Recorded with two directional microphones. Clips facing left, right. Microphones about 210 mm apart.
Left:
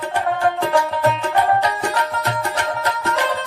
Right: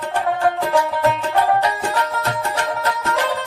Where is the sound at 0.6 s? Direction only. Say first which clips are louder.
Even; centre (ahead or behind).